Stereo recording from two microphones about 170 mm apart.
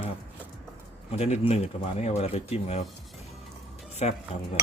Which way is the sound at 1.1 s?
40° left (ahead or behind).